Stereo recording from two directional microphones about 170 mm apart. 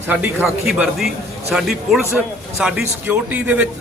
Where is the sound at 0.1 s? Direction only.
5° right (ahead or behind).